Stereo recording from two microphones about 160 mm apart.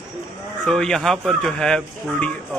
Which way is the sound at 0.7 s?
5° left (ahead or behind).